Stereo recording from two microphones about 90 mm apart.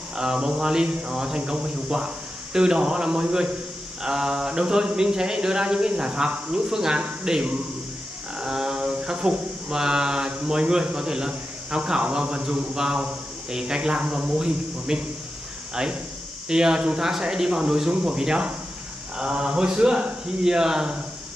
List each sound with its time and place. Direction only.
0.1 s speech: 10° right (ahead or behind)